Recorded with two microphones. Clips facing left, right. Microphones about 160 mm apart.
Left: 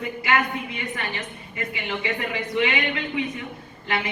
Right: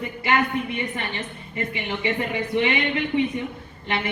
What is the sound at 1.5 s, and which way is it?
Speech, 25° right (ahead or behind).